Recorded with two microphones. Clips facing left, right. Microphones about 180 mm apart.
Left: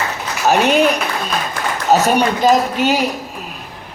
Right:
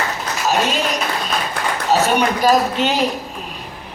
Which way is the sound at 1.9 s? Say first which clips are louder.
Left 3 dB; 40° left (ahead or behind).